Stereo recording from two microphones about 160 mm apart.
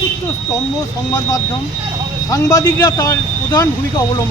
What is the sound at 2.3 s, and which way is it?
Speech, 20° left (ahead or behind).